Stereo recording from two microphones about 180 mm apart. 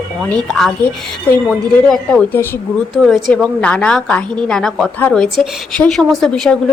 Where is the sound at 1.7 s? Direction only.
5° left (ahead or behind).